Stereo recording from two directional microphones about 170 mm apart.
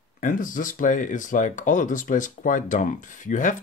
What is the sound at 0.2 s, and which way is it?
Speech, 50° left (ahead or behind).